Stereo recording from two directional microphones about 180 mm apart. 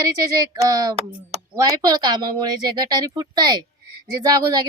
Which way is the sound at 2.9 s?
20° right (ahead or behind).